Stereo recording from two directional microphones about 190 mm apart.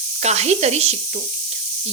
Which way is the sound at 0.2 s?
35° right (ahead or behind).